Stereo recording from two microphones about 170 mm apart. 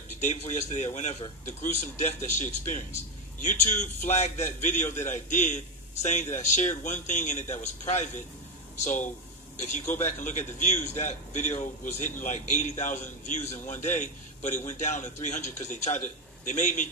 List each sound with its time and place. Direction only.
0.2 s a man's voice: 45° left (ahead or behind)